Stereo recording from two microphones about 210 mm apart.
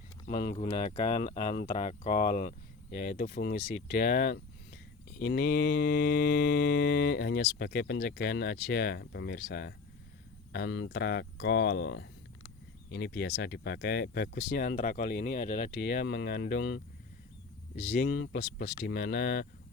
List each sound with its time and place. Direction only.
0.3 s speech: 35° left (ahead or behind)
1.6 s mantra: 35° left (ahead or behind)
18.3 s speech: 55° left (ahead or behind)